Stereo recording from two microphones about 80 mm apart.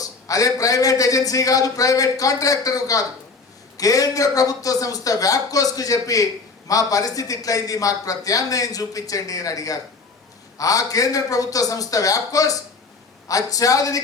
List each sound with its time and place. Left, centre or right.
0.0 s a man's voice: left